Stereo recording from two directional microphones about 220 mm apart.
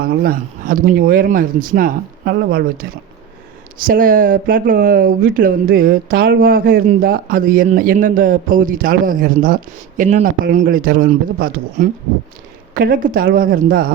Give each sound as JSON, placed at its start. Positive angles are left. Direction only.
{"t": 0.0, "sound": "speech", "side_deg": -40}